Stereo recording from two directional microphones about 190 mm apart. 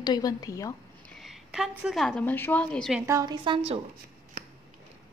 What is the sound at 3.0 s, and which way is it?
Speech, 20° right (ahead or behind).